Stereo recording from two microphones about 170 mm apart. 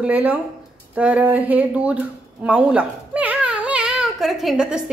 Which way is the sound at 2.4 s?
5° right (ahead or behind).